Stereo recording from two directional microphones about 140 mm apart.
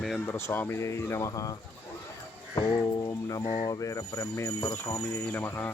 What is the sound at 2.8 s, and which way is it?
Music, 25° left (ahead or behind).